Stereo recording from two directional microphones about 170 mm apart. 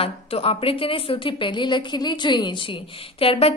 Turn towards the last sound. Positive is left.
turn(degrees=35)  # may be behind; listen again after turning